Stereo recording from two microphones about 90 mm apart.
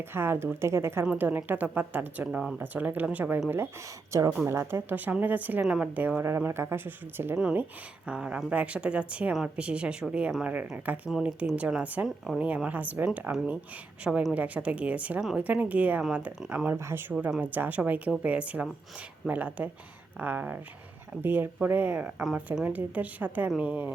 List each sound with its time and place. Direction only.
0.0 s speech: 25° right (ahead or behind); by 2.6 s 10° right (ahead or behind)
2.6 s speech: 20° right (ahead or behind)
4.1 s speech: 35° right (ahead or behind); by 5.6 s 20° right (ahead or behind)
5.6 s speech: 5° right (ahead or behind)
6.0 s speech: 20° right (ahead or behind)
6.2 s speech: 30° right (ahead or behind)
8.0 s speech: 10° right (ahead or behind)
12.0 s a woman's voice: centre (ahead or behind)
12.4 s speech: 15° right (ahead or behind)
14.0 s speech: 5° right (ahead or behind)
16.6 s speech: 25° right (ahead or behind)